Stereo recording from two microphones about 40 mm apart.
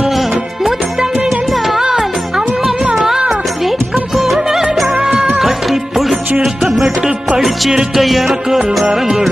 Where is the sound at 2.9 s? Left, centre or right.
Centre.